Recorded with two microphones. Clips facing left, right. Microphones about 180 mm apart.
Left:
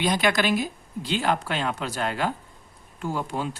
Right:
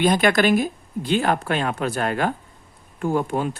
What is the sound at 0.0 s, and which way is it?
Speech, 50° right (ahead or behind).